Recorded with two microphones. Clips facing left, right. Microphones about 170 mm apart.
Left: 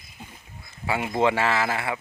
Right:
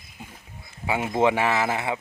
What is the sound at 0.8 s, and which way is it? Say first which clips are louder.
Speech: right 1 dB; 20° right (ahead or behind).